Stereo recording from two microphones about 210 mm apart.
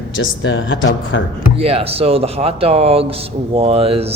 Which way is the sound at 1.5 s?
30° right (ahead or behind).